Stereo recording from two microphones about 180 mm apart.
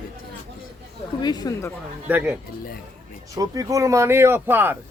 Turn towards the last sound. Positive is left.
turn(degrees=-10)  # may be behind; listen again after turning